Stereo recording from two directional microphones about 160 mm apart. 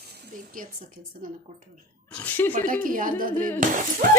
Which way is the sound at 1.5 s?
55° right (ahead or behind).